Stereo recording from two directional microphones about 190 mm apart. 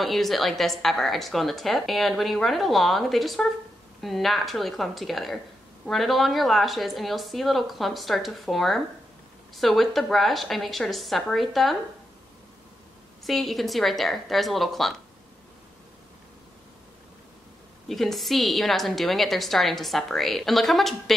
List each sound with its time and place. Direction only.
0.0 s a woman's voice: centre (ahead or behind)
13.2 s a woman's voice: centre (ahead or behind)
17.8 s a woman's voice: centre (ahead or behind)